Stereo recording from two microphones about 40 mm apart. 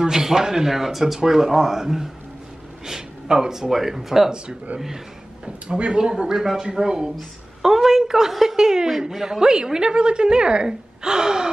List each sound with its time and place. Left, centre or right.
0.0 s a woman's voice: centre
5.4 s a woman's voice: right